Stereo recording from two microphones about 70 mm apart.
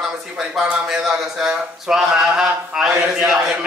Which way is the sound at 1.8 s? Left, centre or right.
Centre.